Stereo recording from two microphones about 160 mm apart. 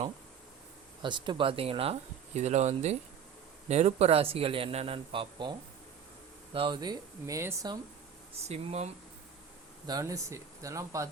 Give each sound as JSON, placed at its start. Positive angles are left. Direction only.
{"t": 1.0, "sound": "speech", "side_deg": -30}
{"t": 8.4, "sound": "speech", "side_deg": -45}
{"t": 9.8, "sound": "speech", "side_deg": -20}